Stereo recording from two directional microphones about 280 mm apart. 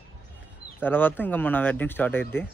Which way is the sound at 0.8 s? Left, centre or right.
Centre.